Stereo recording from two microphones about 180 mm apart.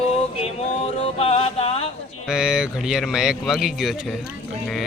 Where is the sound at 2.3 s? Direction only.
5° right (ahead or behind).